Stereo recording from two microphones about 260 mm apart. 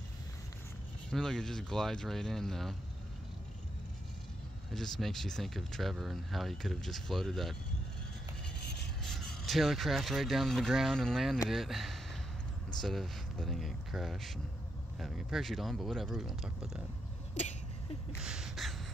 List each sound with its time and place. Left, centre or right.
1.1 s speech: centre
4.7 s speech: centre
9.0 s speech: centre
17.3 s vehicle: left
18.1 s a sound: centre